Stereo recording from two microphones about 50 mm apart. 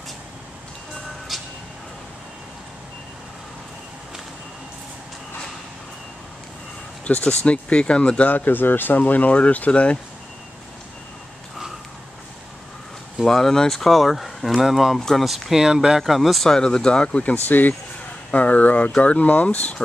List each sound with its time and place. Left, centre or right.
1.3 s a sound: centre
7.1 s speech: left
8.3 s speech: left
9.0 s speech: left
13.2 s speech: centre
15.0 s speech: centre
15.2 s speech: centre
16.1 s speech: centre
16.4 s speech: centre